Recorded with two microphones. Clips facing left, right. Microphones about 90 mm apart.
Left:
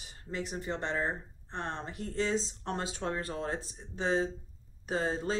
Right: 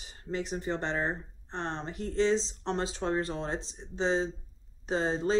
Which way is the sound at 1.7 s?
5° left (ahead or behind).